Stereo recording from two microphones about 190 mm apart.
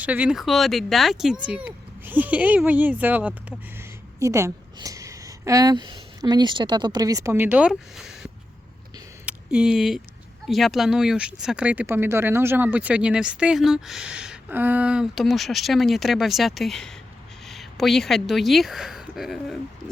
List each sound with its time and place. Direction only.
0.0 s a woman's voice: 5° right (ahead or behind)